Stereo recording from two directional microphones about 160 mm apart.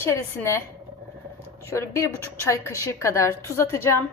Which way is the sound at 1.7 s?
15° left (ahead or behind).